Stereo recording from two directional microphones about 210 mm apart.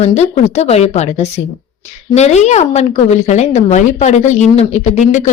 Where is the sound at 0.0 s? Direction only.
30° left (ahead or behind).